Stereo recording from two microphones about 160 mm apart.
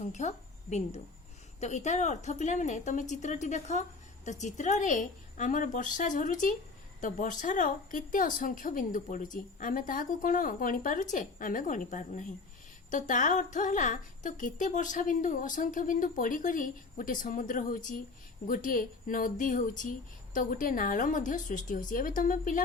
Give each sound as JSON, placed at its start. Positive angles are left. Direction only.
{"t": 0.0, "sound": "a woman's voice", "side_deg": 45}